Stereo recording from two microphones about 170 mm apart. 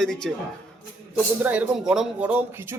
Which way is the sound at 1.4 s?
10° right (ahead or behind).